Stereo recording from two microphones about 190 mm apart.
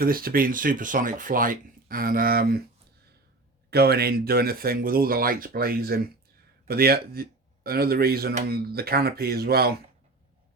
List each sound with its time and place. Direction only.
0.0 s speech: 50° right (ahead or behind)
3.7 s speech: 55° right (ahead or behind)